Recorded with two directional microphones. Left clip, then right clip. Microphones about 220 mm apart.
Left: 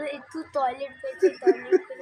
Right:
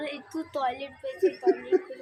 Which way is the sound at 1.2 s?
35° left (ahead or behind).